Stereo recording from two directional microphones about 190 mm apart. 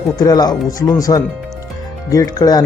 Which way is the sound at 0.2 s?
20° left (ahead or behind).